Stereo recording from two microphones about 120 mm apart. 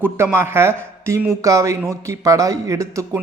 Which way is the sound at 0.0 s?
20° right (ahead or behind).